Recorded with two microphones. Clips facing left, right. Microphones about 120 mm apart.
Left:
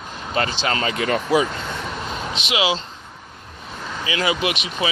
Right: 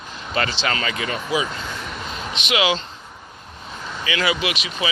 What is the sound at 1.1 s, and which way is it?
Speech, 55° left (ahead or behind).